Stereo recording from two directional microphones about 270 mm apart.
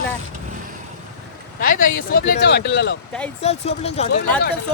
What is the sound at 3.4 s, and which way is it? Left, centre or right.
Speech, left.